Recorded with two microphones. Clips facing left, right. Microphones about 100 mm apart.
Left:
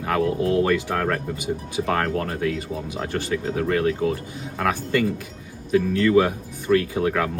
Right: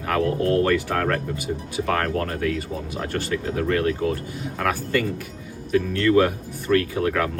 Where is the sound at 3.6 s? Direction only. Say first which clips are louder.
Left 1 dB; 20° left (ahead or behind).